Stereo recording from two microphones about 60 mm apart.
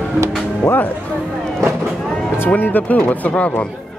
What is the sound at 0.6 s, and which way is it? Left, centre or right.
Speech, left.